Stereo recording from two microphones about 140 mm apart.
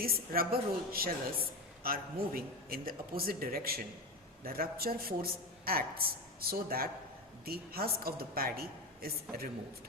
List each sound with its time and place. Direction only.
0.0 s a man's voice: 90° right